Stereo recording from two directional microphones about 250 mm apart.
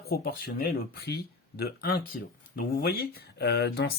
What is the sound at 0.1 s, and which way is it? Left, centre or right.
Speech, left.